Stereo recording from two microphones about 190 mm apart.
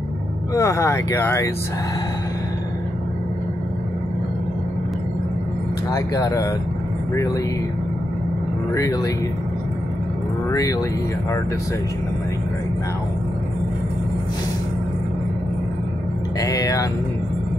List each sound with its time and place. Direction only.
0.6 s speech: 15° left (ahead or behind)
5.9 s speech: 15° left (ahead or behind)
8.7 s speech: 15° left (ahead or behind)
10.5 s speech: 20° left (ahead or behind)
16.3 s speech: 20° left (ahead or behind)